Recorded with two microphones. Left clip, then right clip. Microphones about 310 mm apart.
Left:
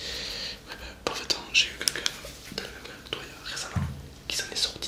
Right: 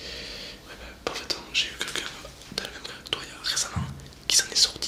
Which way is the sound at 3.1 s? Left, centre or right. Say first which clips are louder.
Right 7 dB; centre.